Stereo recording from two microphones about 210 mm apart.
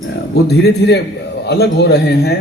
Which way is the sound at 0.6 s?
50° left (ahead or behind).